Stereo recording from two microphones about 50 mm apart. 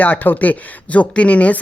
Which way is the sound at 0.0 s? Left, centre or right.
Left.